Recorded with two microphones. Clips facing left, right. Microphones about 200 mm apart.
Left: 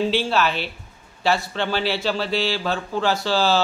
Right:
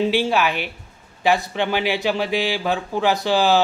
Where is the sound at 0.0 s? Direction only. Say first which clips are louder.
Right 2 dB; 15° right (ahead or behind).